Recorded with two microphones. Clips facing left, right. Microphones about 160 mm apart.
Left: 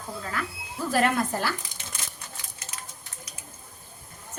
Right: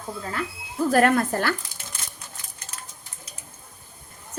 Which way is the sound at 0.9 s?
55° right (ahead or behind).